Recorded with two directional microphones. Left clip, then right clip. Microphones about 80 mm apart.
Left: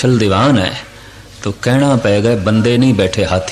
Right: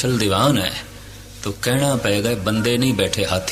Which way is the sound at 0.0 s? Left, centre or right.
Right.